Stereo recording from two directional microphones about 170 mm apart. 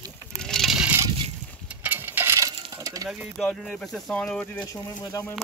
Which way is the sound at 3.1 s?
Centre (ahead or behind).